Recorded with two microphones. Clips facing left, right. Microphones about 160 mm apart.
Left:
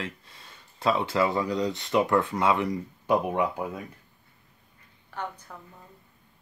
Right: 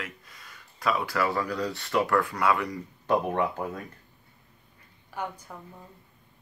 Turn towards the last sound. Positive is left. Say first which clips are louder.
# right 1 dB
turn(degrees=-10)  # may be behind; listen again after turning